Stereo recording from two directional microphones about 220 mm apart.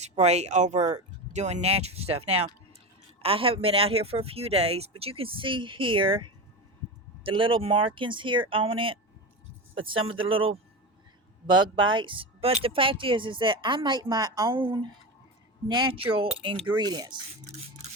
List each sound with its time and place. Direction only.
0.0 s speech: 30° right (ahead or behind)
10.1 s speech: 25° right (ahead or behind)